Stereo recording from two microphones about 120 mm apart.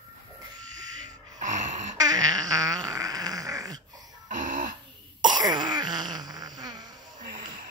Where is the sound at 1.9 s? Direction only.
30° right (ahead or behind).